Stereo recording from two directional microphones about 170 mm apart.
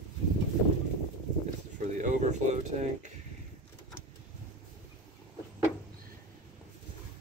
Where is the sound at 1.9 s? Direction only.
45° right (ahead or behind).